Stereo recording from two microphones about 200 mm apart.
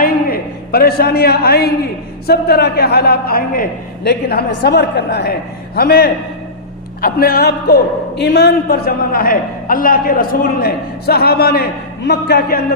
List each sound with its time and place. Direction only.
0.0 s a man's voice: 50° left (ahead or behind)